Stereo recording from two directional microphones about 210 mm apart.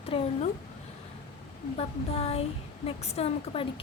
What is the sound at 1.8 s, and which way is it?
Speech, 30° left (ahead or behind).